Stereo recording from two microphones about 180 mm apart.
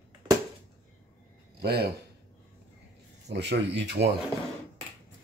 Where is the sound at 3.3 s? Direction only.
70° right (ahead or behind).